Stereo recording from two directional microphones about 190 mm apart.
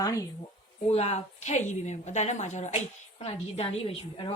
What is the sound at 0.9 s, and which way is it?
A woman's voice, 35° left (ahead or behind).